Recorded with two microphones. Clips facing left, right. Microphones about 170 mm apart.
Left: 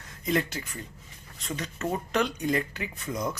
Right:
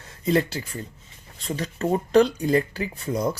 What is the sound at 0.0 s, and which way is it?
Speech, 30° right (ahead or behind).